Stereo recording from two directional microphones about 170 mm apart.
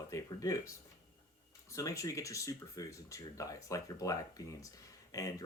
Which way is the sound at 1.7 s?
20° left (ahead or behind).